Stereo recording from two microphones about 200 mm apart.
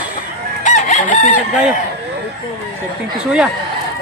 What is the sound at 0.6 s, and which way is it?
Chicken, 40° left (ahead or behind).